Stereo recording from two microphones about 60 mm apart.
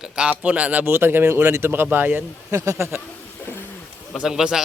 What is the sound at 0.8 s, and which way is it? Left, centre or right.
Speech, right.